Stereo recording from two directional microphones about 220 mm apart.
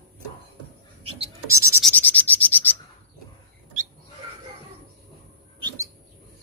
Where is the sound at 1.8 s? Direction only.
5° left (ahead or behind).